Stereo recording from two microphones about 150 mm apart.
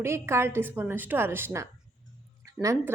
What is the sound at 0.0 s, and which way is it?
A woman's voice, 15° right (ahead or behind).